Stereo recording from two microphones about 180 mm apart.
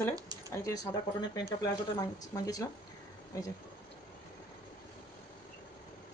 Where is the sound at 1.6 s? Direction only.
20° left (ahead or behind).